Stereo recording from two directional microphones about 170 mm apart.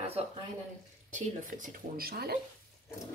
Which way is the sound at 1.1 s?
50° right (ahead or behind).